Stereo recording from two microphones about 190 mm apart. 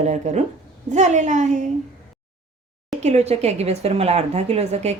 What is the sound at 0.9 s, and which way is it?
Speech, 40° right (ahead or behind).